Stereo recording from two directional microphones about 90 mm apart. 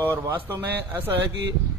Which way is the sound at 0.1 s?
25° right (ahead or behind).